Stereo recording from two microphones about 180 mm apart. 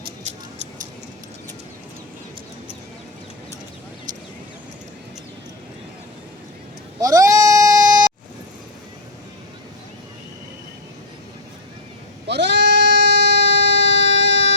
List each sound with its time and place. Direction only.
7.0 s goat: 20° right (ahead or behind)
12.3 s goat: 75° right (ahead or behind)